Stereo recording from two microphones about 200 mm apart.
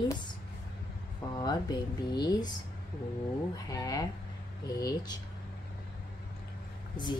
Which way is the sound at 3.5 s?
20° left (ahead or behind).